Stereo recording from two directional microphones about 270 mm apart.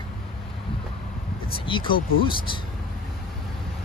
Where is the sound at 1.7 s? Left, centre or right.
Centre.